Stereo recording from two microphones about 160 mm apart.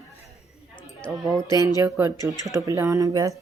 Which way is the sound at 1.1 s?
5° right (ahead or behind).